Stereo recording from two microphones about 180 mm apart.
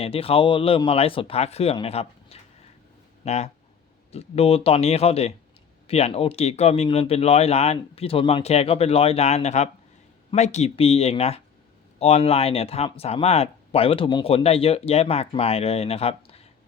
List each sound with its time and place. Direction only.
0.0 s speech: 30° left (ahead or behind)